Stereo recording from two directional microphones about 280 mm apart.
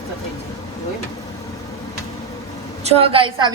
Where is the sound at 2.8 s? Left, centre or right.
Right.